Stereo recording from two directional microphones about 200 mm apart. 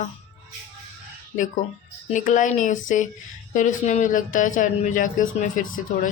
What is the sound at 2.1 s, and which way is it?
Speech, 40° left (ahead or behind).